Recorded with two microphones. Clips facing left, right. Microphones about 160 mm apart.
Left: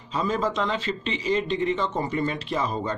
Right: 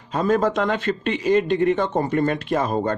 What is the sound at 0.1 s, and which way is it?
Speech, 55° right (ahead or behind).